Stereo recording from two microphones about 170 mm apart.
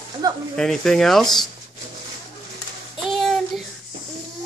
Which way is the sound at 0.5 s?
5° left (ahead or behind).